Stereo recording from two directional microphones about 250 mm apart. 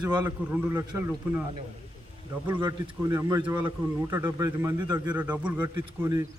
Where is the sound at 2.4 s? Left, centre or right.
Centre.